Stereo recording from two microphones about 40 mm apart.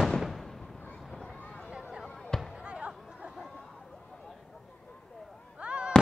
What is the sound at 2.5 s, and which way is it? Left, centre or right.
Basketball bounce, right.